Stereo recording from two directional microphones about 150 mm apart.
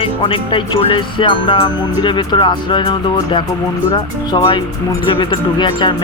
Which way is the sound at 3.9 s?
30° left (ahead or behind).